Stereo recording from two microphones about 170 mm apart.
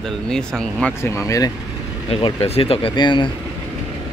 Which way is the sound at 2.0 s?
35° left (ahead or behind).